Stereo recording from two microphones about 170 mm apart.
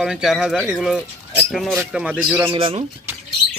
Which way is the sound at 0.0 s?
Centre (ahead or behind).